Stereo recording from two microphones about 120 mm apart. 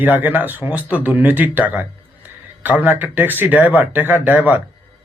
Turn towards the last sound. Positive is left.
turn(degrees=-15)  # may be behind; listen again after turning